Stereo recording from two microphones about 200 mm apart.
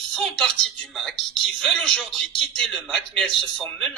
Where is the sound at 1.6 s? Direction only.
Centre (ahead or behind).